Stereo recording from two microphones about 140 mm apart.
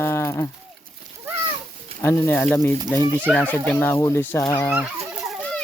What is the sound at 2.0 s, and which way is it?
A child's voice, 15° left (ahead or behind).